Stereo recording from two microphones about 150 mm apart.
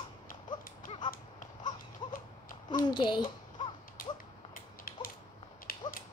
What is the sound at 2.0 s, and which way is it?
Horse, 30° left (ahead or behind).